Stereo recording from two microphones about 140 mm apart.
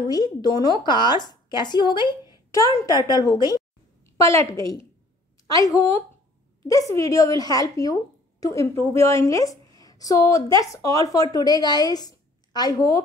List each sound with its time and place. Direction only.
0.1 s a woman's voice: 30° left (ahead or behind)